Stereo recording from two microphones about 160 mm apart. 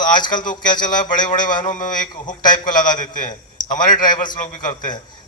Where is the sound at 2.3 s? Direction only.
30° left (ahead or behind).